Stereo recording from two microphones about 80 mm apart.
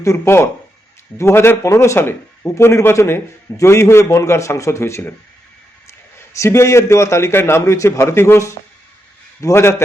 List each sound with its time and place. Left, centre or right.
0.0 s a man's voice: left
6.3 s a man's voice: left